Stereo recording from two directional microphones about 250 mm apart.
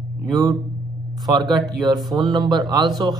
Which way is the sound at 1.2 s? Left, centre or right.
Centre.